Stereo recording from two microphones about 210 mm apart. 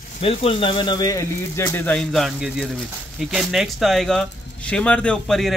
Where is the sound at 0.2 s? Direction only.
25° left (ahead or behind).